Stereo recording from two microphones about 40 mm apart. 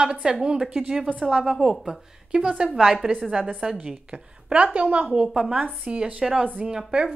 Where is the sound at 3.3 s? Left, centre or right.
Right.